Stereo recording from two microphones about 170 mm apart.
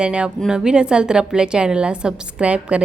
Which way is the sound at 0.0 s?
5° right (ahead or behind).